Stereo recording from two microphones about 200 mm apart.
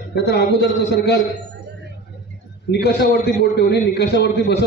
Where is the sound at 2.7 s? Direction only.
55° left (ahead or behind).